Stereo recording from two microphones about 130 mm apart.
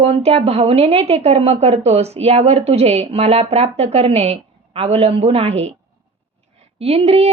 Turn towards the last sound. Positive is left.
turn(degrees=-50)  # may be behind; listen again after turning